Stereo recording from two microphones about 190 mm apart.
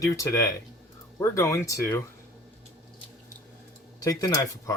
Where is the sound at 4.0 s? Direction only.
20° left (ahead or behind).